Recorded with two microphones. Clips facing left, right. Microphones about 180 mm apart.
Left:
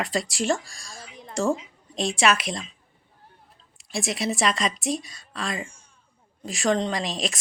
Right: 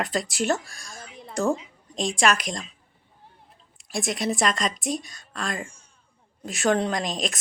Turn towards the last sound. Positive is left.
turn(degrees=0)  # may be behind; listen again after turning